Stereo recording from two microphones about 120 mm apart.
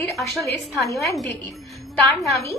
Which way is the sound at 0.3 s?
Centre (ahead or behind).